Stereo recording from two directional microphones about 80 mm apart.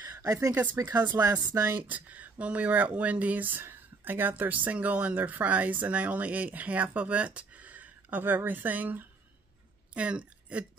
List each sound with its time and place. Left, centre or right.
0.1 s speech: right
0.9 s speech: right
1.5 s speech: right
1.8 s speech: centre